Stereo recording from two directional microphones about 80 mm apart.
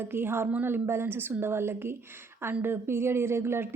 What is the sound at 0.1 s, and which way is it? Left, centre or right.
A woman's voice, right.